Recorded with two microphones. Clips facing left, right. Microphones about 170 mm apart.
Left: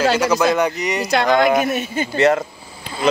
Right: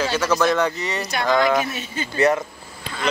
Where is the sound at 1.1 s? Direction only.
65° left (ahead or behind).